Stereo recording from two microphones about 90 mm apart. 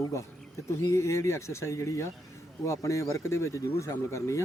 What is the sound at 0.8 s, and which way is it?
Speech, 30° left (ahead or behind).